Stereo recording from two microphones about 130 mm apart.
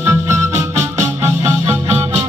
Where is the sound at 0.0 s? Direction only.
20° right (ahead or behind).